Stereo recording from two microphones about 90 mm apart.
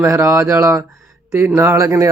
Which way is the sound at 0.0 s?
30° right (ahead or behind).